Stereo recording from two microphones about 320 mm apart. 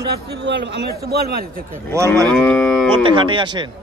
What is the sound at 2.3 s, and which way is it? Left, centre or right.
Moo, centre.